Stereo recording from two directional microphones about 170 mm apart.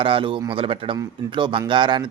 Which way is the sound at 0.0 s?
30° right (ahead or behind).